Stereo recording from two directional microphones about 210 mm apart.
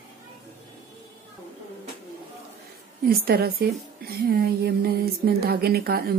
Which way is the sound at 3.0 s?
45° right (ahead or behind).